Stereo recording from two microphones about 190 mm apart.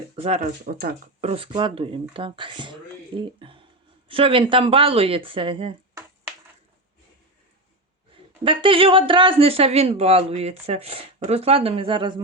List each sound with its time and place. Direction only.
0.2 s speech: 35° right (ahead or behind)
0.6 s speech: 55° right (ahead or behind)
1.2 s speech: 30° right (ahead or behind)
8.4 s speech: 25° right (ahead or behind)